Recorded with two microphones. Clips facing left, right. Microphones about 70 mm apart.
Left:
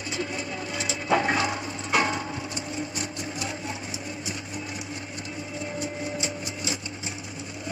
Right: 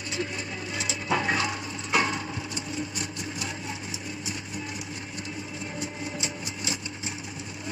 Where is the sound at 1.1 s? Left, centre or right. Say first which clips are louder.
Left 3 dB; left.